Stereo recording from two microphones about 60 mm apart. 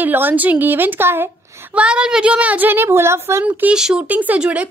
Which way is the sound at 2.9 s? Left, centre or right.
Right.